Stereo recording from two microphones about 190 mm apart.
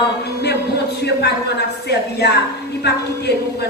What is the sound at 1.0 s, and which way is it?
Speech, 60° left (ahead or behind).